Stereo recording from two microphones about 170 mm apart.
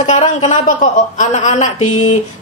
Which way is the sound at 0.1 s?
40° left (ahead or behind).